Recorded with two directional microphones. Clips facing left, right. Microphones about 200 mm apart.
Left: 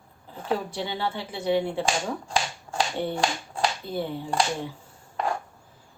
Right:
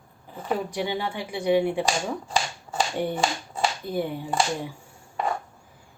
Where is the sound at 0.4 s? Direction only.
15° right (ahead or behind).